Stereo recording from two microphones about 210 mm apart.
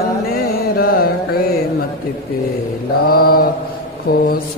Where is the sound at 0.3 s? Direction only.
45° left (ahead or behind).